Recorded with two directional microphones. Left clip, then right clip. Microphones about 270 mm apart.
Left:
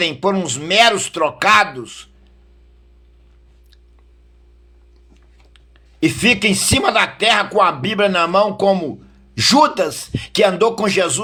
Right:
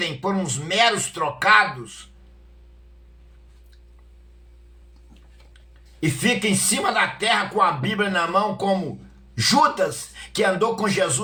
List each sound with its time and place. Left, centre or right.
0.0 s speech: left
6.0 s speech: left